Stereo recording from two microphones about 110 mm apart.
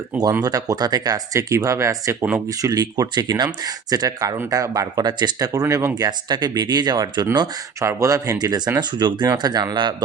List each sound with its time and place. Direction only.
0.4 s speech: 35° right (ahead or behind)
5.9 s speech: 40° right (ahead or behind)
7.8 s speech: 25° right (ahead or behind)